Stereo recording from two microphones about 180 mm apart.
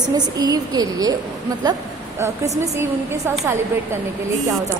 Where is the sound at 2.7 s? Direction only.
15° right (ahead or behind).